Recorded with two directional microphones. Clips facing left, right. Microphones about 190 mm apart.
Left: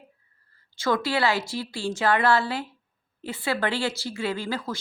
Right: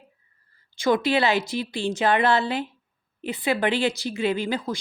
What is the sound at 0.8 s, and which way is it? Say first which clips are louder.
A woman's voice: right 3 dB; 20° right (ahead or behind).